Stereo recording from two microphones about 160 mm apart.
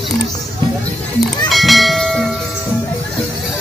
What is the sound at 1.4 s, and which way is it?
Bell, centre (ahead or behind).